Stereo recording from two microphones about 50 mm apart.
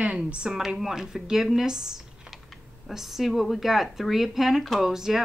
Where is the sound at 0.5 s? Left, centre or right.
Centre.